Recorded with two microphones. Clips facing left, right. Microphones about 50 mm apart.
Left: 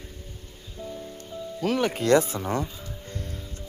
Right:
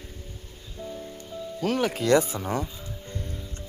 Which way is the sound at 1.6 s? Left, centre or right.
Left.